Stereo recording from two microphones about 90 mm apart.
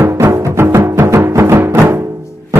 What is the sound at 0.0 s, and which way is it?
Timpani, 25° right (ahead or behind).